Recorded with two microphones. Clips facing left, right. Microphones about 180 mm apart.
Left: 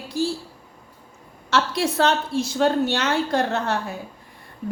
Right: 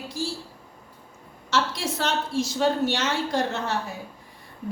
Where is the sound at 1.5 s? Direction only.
60° left (ahead or behind).